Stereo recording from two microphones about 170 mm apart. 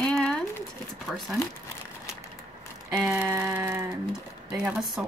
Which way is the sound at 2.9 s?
5° right (ahead or behind).